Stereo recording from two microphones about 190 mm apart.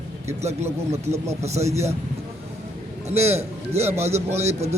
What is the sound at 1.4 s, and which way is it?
Speech, 35° right (ahead or behind).